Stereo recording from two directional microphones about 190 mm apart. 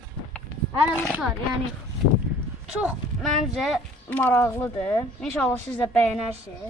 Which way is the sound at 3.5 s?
Centre (ahead or behind).